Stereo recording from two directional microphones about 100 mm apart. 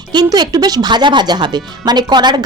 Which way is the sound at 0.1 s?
45° right (ahead or behind).